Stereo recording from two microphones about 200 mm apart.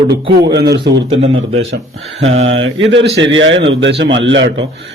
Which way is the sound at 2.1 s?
75° right (ahead or behind).